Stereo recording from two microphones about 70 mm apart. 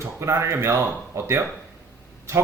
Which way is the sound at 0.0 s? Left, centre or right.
Right.